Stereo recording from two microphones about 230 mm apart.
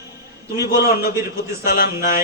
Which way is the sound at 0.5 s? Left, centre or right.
Left.